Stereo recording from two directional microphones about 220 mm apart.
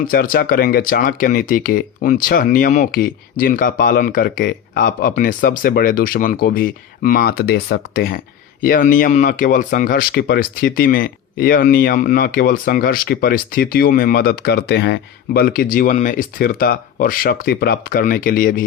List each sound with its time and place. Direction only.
0.1 s speech: 40° left (ahead or behind)